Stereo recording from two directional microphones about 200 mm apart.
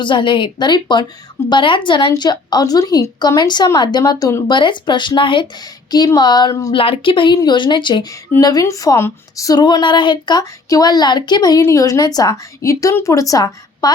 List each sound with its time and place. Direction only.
0.0 s speech: 25° left (ahead or behind)
6.7 s speech: 25° left (ahead or behind)